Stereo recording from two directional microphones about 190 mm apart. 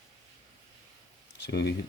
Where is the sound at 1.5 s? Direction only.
60° left (ahead or behind).